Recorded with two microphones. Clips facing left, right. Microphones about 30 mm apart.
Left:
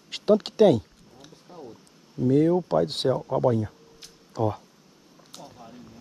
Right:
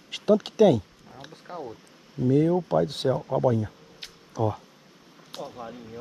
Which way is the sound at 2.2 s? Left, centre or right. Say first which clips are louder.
Left 1 dB; right.